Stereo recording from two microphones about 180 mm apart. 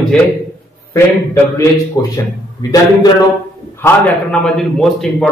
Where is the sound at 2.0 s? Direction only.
20° left (ahead or behind).